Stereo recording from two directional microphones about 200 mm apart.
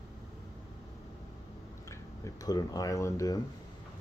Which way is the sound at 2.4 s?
20° left (ahead or behind).